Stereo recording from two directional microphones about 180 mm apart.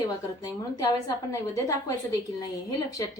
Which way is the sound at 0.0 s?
20° left (ahead or behind).